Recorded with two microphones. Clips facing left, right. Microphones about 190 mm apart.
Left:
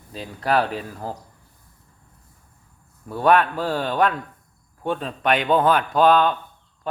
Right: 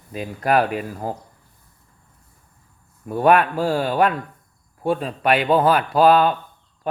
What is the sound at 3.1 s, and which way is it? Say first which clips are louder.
Speech: right 2 dB; 15° right (ahead or behind).